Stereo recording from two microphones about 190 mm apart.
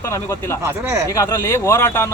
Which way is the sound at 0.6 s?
15° right (ahead or behind).